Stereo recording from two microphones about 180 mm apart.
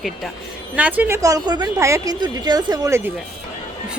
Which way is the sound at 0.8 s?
10° right (ahead or behind).